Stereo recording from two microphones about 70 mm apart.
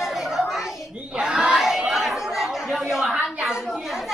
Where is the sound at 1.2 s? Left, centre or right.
Centre.